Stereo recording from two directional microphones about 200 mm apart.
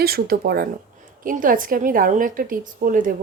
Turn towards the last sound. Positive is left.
turn(degrees=-40)  # may be behind; listen again after turning